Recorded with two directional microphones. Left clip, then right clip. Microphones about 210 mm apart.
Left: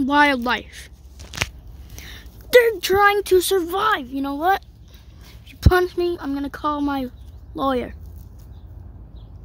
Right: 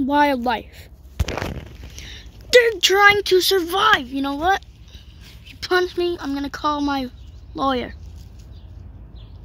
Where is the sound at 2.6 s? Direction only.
10° left (ahead or behind).